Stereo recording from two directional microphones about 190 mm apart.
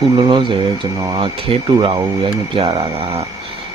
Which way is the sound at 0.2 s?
25° right (ahead or behind).